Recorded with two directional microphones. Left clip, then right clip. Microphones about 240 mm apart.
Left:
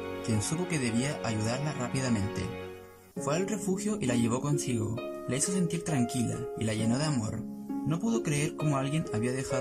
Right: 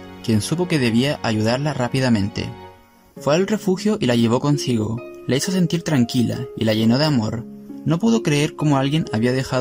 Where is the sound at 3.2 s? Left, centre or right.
Right.